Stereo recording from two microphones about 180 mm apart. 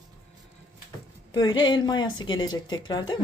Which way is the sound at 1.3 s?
25° left (ahead or behind).